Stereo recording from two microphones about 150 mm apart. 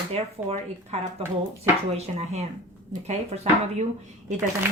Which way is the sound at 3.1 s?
50° right (ahead or behind).